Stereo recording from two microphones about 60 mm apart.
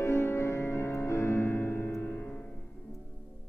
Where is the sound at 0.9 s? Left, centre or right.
Left.